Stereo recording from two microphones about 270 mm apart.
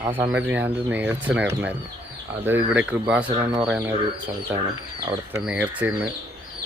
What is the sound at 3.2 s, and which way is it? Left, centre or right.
Speech, centre.